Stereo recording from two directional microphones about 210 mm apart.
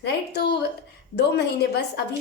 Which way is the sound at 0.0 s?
50° left (ahead or behind).